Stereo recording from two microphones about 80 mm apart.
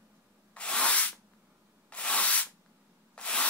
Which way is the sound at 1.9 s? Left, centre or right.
Centre.